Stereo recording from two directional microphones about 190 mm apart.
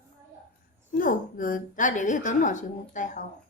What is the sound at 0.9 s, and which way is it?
A woman's voice, 45° left (ahead or behind).